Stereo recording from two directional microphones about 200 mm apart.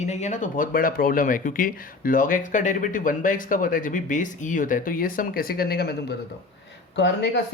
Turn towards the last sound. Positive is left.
turn(degrees=60)  # may be behind; listen again after turning